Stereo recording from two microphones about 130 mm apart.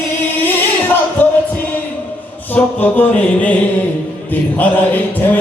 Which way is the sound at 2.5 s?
15° left (ahead or behind).